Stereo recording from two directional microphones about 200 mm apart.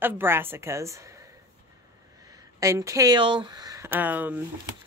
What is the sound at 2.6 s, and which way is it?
Speech, 15° right (ahead or behind).